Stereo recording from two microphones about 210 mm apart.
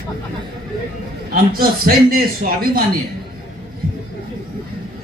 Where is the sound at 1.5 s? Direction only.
45° right (ahead or behind).